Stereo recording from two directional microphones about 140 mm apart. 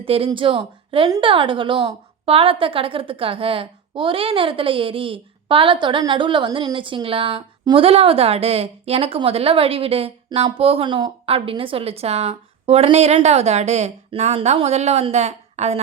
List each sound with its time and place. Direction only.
0.0 s a woman's voice: 40° right (ahead or behind)